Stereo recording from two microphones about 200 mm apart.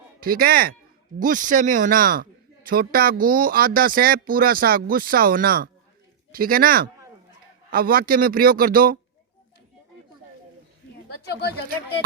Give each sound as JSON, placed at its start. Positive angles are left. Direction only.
{"t": 0.2, "sound": "speech", "side_deg": -45}